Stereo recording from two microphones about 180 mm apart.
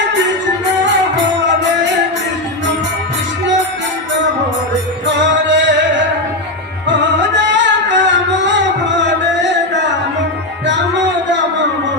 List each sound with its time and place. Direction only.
5.5 s music: 90° right
7.5 s music: 85° right